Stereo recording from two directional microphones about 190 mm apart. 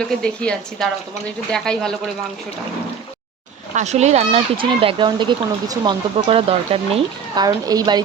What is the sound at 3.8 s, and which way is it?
Speech, 35° right (ahead or behind).